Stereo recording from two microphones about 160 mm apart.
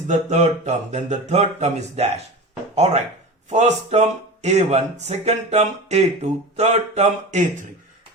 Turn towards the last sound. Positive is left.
turn(degrees=-45)  # may be behind; listen again after turning